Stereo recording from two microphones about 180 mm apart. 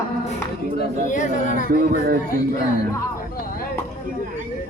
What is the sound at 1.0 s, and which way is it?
Speech, 45° left (ahead or behind).